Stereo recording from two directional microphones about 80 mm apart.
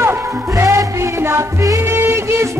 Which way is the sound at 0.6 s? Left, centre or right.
Right.